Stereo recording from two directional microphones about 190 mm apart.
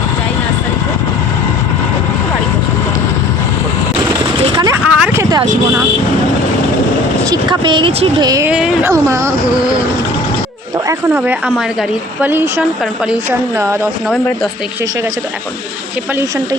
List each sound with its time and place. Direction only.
4.5 s a sound: 20° right (ahead or behind)
4.9 s a sound: 5° right (ahead or behind)
7.3 s speech: 25° right (ahead or behind)
8.4 s a woman's voice: 5° right (ahead or behind)
8.8 s speech: 15° right (ahead or behind)
10.8 s speech: 10° right (ahead or behind)